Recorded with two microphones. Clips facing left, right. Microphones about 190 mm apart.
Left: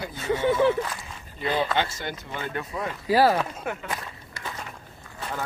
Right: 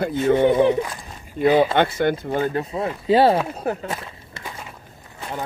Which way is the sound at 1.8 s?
55° right (ahead or behind).